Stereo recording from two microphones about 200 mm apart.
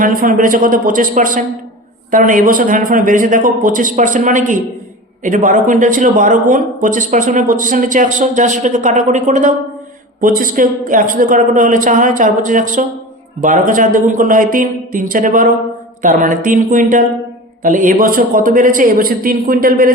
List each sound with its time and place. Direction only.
0.0 s a man's voice: 45° right (ahead or behind)